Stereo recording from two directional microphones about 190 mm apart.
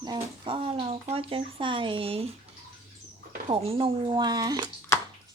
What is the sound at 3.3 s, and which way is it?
Speech, 30° right (ahead or behind).